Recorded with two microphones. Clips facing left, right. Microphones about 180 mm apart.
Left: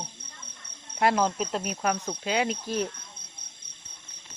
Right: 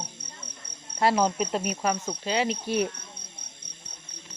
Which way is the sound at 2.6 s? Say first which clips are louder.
Right 3 dB; 15° right (ahead or behind).